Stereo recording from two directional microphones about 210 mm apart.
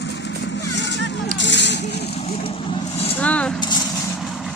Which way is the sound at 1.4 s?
55° left (ahead or behind).